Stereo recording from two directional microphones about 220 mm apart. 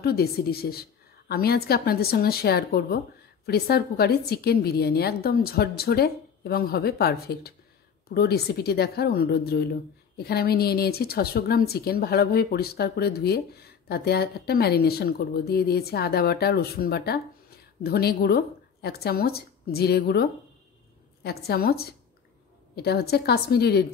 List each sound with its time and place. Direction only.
0.0 s speech: 45° left (ahead or behind)